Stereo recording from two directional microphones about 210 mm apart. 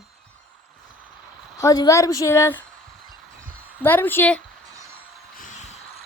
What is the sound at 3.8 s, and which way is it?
Speech, 10° left (ahead or behind).